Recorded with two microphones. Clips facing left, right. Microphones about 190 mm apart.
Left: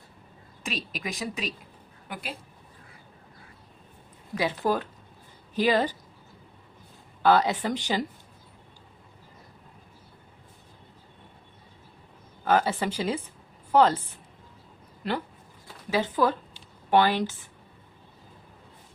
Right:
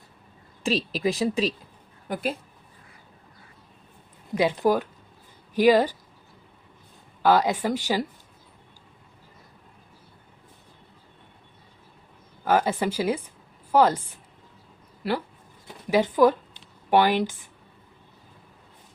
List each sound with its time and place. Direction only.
0.6 s a woman's voice: 30° right (ahead or behind)
4.4 s speech: 15° right (ahead or behind)
7.2 s speech: 10° right (ahead or behind)
12.5 s speech: 10° right (ahead or behind)
15.0 s speech: 5° right (ahead or behind)